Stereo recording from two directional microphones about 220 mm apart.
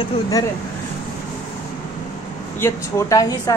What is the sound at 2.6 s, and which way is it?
Speech, 15° left (ahead or behind).